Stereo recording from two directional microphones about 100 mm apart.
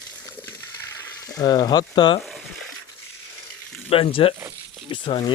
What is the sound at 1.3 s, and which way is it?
Speech, 45° left (ahead or behind).